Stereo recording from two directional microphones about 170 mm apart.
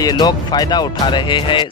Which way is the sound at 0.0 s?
25° left (ahead or behind).